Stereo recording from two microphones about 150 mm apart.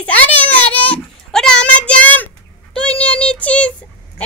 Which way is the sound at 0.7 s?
5° left (ahead or behind).